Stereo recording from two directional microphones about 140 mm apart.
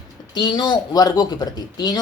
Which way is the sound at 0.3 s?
30° left (ahead or behind).